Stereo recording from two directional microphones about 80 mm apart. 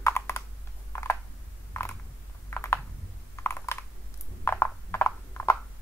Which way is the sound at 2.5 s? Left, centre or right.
Left.